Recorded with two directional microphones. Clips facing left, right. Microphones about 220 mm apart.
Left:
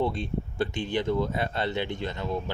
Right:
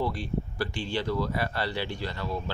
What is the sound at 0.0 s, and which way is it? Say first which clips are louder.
Speech: left 2 dB; 25° left (ahead or behind).